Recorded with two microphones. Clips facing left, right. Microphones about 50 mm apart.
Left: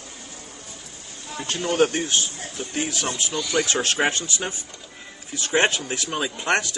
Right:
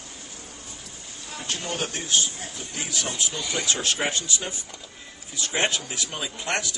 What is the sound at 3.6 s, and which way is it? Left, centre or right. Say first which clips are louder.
Speech: left 5 dB; left.